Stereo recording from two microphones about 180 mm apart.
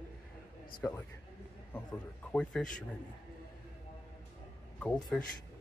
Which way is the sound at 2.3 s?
5° left (ahead or behind).